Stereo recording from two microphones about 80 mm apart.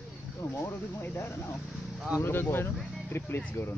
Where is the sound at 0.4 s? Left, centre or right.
Left.